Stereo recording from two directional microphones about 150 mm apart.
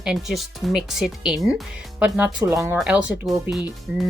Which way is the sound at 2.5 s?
20° right (ahead or behind).